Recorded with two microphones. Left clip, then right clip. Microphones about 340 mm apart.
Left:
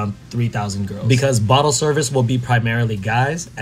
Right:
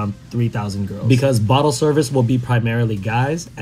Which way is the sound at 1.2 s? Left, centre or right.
Left.